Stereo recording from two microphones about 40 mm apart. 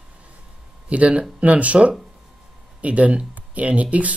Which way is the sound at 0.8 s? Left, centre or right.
Right.